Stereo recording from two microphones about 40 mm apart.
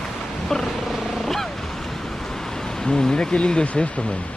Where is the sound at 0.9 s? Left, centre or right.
Centre.